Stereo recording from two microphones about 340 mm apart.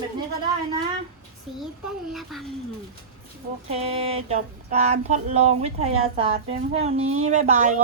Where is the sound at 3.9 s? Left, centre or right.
Centre.